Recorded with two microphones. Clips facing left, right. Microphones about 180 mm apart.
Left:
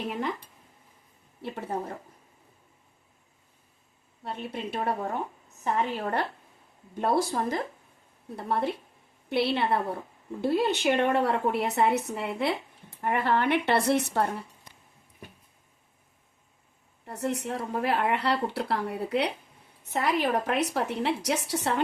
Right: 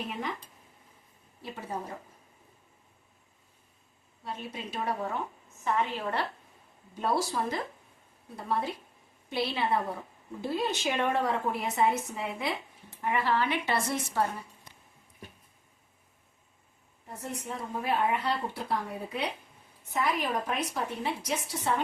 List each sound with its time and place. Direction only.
1.4 s a woman's voice: 60° left (ahead or behind)
4.2 s a woman's voice: 60° left (ahead or behind)
5.6 s a woman's voice: 45° left (ahead or behind)
8.4 s a woman's voice: 60° left (ahead or behind)
13.0 s a woman's voice: 50° left (ahead or behind)
17.1 s a woman's voice: 75° left (ahead or behind)